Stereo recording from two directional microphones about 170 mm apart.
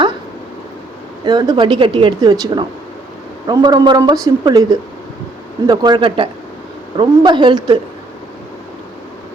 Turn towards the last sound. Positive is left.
turn(degrees=-25)  # may be behind; listen again after turning